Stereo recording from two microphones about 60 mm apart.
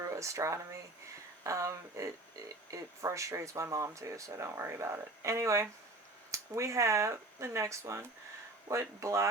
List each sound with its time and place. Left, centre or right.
0.1 s speech: right